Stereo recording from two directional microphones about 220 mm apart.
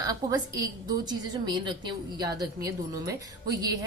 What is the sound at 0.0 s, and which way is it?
A woman's voice, 15° right (ahead or behind).